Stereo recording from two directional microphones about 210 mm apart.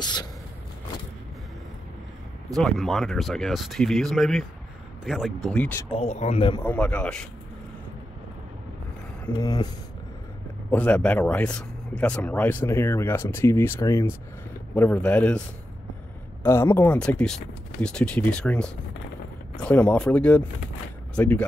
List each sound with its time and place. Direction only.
0.0 s a sound: 20° left (ahead or behind)
2.5 s speech: centre (ahead or behind)
5.9 s speech: 30° left (ahead or behind)
6.6 s speech: 5° left (ahead or behind)
9.2 s speech: 15° left (ahead or behind)
10.7 s speech: 5° left (ahead or behind)
16.4 s speech: 10° left (ahead or behind)